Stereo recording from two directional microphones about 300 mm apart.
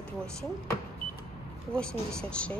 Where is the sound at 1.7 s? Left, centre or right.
Centre.